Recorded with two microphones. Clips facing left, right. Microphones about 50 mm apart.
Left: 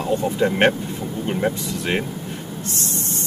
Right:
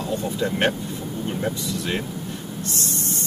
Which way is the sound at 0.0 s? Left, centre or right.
Left.